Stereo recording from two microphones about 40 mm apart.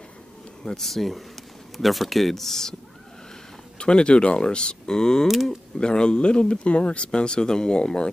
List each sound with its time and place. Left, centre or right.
0.7 s speech: centre
3.7 s speech: left
5.3 s speech: centre
5.8 s speech: left
7.1 s speech: centre